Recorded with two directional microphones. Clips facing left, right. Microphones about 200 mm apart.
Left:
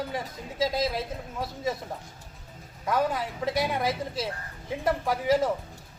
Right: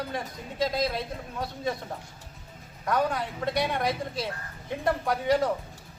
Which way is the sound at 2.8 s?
5° left (ahead or behind).